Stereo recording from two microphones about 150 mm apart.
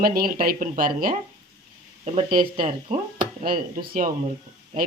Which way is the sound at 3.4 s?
75° right (ahead or behind).